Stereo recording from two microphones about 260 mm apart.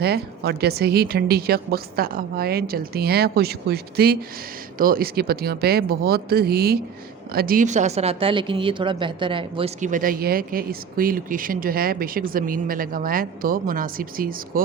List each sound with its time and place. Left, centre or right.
0.0 s speech: right